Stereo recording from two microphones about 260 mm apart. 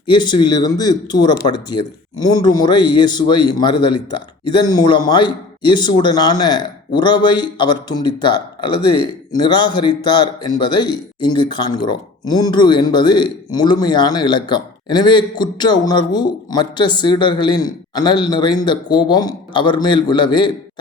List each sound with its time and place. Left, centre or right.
0.1 s speech: centre